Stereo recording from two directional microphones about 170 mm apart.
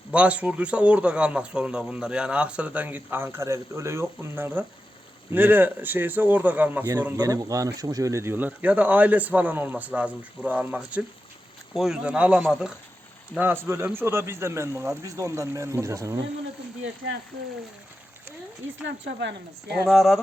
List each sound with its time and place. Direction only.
0.1 s a man's voice: 5° right (ahead or behind)
18.8 s speech: 90° right
19.8 s speech: centre (ahead or behind)